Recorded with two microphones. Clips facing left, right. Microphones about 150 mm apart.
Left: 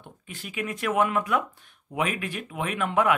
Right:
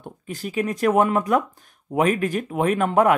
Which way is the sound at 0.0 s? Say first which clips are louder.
Right 10 dB; 40° right (ahead or behind).